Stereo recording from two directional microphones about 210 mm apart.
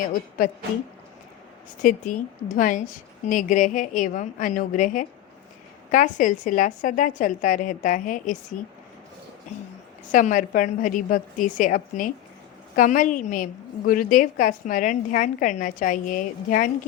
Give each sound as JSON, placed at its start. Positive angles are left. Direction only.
{"t": 0.1, "sound": "a woman's voice", "side_deg": 40}
{"t": 1.8, "sound": "a woman's voice", "side_deg": 40}
{"t": 10.1, "sound": "a woman's voice", "side_deg": 40}